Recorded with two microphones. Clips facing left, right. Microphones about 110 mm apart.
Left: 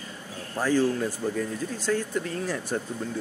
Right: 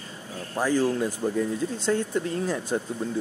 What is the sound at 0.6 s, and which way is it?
Speech, 15° right (ahead or behind).